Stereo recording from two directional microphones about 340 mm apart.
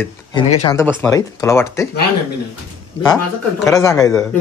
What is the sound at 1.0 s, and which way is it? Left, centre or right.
Speech, centre.